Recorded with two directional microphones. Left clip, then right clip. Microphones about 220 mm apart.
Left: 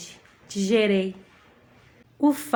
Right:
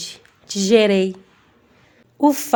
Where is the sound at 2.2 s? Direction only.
15° right (ahead or behind).